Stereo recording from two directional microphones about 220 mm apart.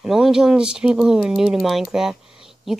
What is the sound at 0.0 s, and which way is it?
Speech, centre (ahead or behind).